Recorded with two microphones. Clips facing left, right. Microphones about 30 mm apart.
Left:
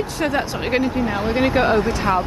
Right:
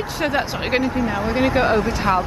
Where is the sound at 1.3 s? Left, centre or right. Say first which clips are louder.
Left 1 dB; centre.